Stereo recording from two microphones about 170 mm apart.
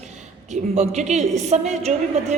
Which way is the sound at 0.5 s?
40° right (ahead or behind).